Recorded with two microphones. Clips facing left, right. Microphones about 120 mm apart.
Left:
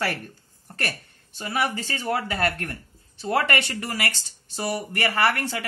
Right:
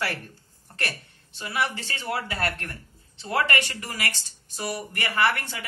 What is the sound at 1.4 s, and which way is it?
Speech, 45° left (ahead or behind).